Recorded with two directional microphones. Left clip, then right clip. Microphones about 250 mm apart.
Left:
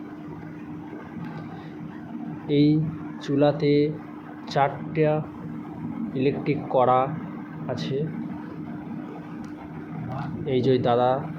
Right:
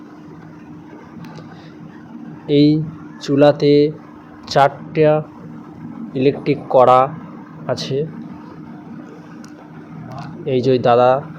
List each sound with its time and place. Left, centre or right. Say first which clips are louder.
2.5 s speech: right 7 dB; centre
10.4 s speech: right 7 dB; centre